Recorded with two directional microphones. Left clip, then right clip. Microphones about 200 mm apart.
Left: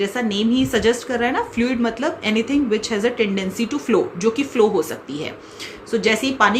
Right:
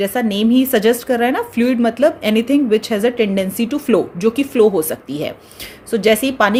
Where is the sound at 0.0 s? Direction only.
50° right (ahead or behind).